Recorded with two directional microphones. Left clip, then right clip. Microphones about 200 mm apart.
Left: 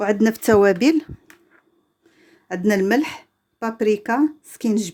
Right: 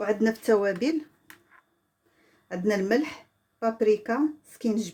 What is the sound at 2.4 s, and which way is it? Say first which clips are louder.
Speech: left 7 dB; 50° left (ahead or behind).